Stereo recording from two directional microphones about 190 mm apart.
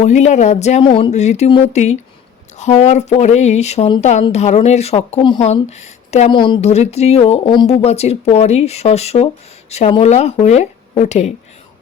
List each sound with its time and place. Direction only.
0.0 s speech: 35° left (ahead or behind)